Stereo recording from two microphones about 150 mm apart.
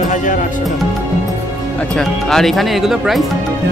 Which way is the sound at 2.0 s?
5° left (ahead or behind).